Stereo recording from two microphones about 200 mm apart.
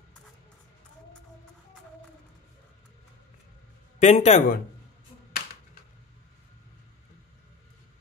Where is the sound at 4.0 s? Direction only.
35° left (ahead or behind).